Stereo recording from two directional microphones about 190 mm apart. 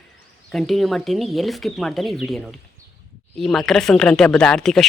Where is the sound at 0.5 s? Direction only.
Centre (ahead or behind).